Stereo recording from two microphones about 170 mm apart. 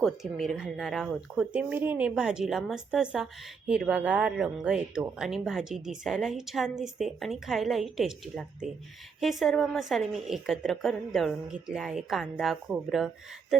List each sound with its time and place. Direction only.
0.0 s speech: centre (ahead or behind)